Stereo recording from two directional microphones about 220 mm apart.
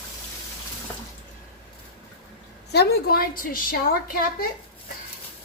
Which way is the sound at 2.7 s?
50° left (ahead or behind).